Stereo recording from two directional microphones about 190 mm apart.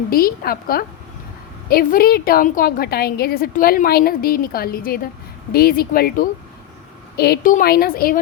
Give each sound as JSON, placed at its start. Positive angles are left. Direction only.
{"t": 0.1, "sound": "a woman's voice", "side_deg": 50}